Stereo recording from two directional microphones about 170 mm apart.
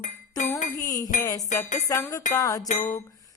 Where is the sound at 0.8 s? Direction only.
20° left (ahead or behind).